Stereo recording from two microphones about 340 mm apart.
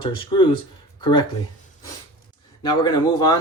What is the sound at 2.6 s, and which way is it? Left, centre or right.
Speech, centre.